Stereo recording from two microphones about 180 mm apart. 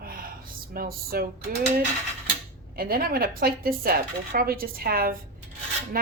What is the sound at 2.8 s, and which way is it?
Speech, 55° right (ahead or behind).